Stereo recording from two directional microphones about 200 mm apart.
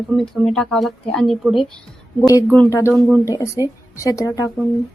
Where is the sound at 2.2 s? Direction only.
15° left (ahead or behind).